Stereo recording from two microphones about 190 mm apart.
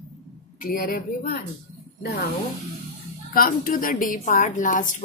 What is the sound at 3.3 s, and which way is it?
A woman's voice, 50° left (ahead or behind).